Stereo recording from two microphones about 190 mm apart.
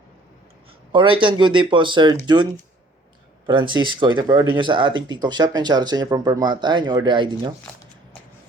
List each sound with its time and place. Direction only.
0.9 s speech: 25° right (ahead or behind)